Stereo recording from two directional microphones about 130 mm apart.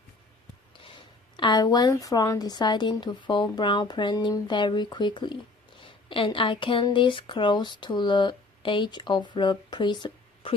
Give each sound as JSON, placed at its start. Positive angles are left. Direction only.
{"t": 0.9, "sound": "speech", "side_deg": 40}